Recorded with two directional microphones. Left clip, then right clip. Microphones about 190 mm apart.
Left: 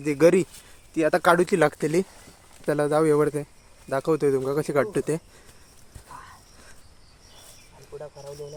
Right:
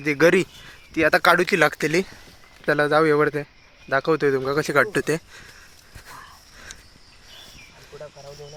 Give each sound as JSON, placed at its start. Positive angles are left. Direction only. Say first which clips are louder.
{"t": 0.0, "sound": "speech", "louder": "right 1 dB", "side_deg": 10}
{"t": 1.2, "sound": "speech", "louder": "right 2 dB", "side_deg": 25}